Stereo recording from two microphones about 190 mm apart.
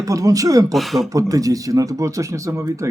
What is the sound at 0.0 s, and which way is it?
Speech, 20° right (ahead or behind).